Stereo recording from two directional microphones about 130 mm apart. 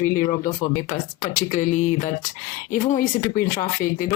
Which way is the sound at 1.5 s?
65° left (ahead or behind).